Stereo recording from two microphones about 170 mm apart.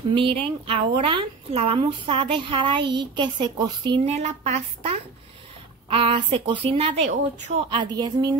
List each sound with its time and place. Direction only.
0.1 s speech: 30° right (ahead or behind)
4.0 s speech: 40° right (ahead or behind); by 8.4 s 20° right (ahead or behind)